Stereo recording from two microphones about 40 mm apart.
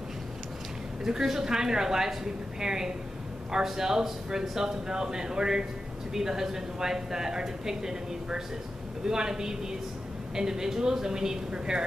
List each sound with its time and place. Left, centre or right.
1.0 s speech: centre